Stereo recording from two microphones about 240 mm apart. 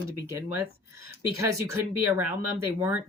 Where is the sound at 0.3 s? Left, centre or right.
Centre.